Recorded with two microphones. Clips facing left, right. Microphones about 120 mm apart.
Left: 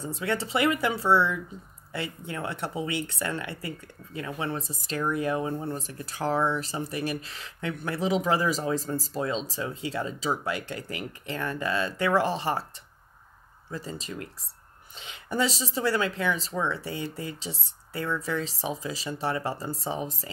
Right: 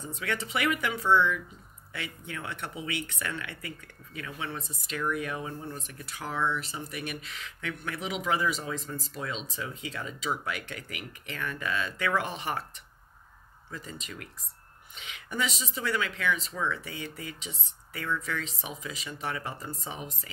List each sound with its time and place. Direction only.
0.0 s speech: 30° left (ahead or behind)
13.7 s speech: 35° left (ahead or behind)